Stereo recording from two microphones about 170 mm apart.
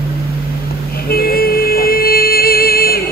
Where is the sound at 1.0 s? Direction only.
60° left (ahead or behind).